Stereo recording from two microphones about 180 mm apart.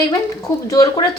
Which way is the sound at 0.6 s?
20° left (ahead or behind).